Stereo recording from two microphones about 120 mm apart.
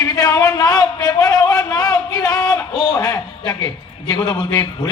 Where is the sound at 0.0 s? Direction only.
30° left (ahead or behind).